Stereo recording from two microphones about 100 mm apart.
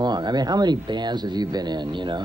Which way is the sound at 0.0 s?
45° right (ahead or behind).